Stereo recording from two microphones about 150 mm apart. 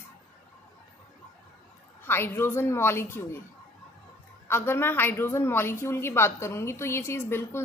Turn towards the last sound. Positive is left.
turn(degrees=15)  # may be behind; listen again after turning